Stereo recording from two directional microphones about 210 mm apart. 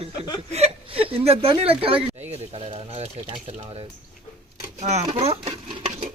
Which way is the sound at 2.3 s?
30° right (ahead or behind).